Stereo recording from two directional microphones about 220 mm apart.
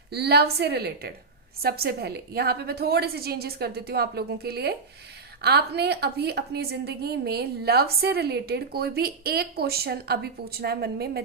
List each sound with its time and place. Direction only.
0.1 s a woman's voice: 45° right (ahead or behind)